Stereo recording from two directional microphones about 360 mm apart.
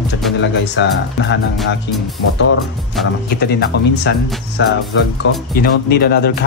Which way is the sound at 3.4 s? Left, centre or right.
Left.